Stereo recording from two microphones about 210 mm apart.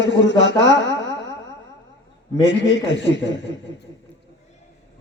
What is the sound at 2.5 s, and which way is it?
A man's voice, 60° left (ahead or behind).